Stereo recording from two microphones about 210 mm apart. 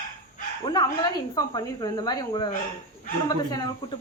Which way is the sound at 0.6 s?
20° left (ahead or behind).